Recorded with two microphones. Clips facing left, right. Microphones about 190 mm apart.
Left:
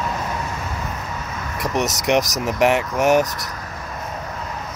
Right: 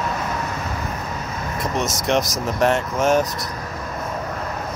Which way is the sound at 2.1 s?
15° left (ahead or behind).